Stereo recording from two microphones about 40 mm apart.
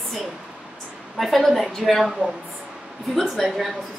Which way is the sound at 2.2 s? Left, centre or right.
Right.